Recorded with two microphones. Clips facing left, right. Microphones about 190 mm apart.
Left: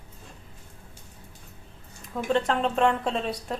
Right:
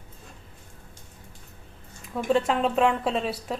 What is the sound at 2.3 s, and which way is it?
Speech, 5° right (ahead or behind).